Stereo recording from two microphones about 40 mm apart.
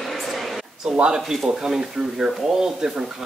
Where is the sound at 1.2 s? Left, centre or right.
Centre.